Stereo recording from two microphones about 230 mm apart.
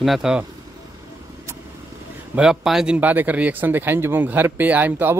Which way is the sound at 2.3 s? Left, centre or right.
Centre.